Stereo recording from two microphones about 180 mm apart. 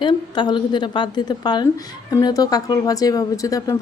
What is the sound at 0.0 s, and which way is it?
A woman's voice, 25° left (ahead or behind).